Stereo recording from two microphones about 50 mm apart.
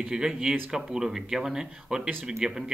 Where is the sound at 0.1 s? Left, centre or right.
Centre.